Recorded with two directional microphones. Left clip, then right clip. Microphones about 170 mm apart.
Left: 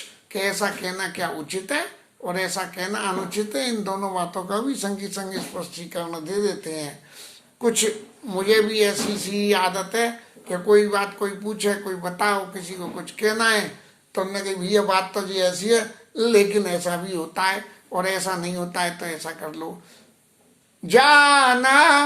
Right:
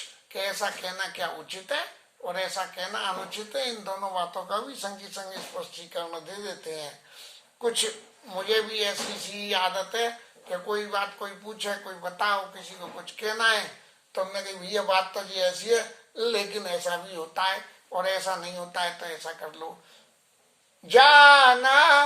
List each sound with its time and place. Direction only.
0.3 s speech: 15° left (ahead or behind)
20.8 s speech: 20° left (ahead or behind)